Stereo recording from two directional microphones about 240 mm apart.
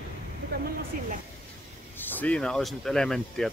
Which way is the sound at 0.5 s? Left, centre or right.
Right.